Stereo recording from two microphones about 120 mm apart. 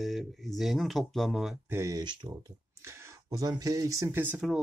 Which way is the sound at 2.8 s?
25° right (ahead or behind).